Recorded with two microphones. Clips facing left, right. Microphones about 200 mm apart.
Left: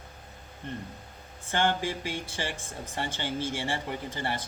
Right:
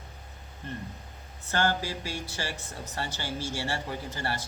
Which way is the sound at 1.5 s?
20° left (ahead or behind).